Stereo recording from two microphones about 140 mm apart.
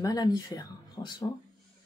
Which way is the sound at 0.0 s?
25° left (ahead or behind).